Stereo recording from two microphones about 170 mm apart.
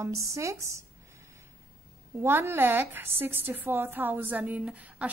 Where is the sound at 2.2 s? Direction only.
15° right (ahead or behind).